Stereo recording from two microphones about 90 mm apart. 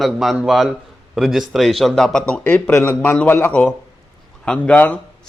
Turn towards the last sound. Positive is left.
turn(degrees=20)  # may be behind; listen again after turning